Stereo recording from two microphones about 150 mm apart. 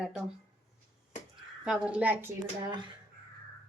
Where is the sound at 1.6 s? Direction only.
5° right (ahead or behind).